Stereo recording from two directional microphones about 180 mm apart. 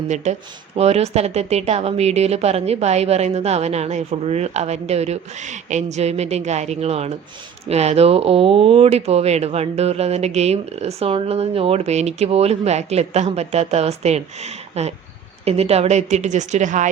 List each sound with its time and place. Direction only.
0.3 s speech: 40° right (ahead or behind)